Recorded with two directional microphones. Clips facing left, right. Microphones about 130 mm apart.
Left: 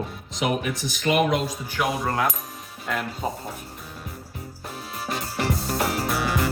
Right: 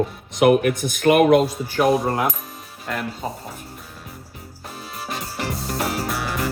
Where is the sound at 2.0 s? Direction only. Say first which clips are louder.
Right 3 dB; 25° right (ahead or behind).